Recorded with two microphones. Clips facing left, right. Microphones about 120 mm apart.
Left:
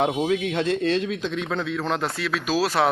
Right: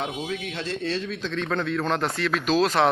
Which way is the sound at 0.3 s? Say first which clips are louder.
Left 8 dB; 70° left (ahead or behind).